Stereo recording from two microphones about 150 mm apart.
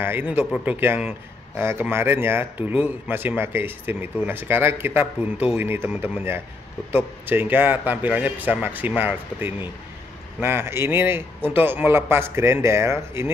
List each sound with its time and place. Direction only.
0.0 s speech: 15° right (ahead or behind)